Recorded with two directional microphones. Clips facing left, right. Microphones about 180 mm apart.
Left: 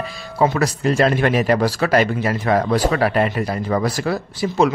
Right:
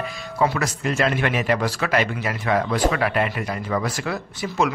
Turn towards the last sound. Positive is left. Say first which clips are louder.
# left 5 dB
turn(degrees=35)  # may be behind; listen again after turning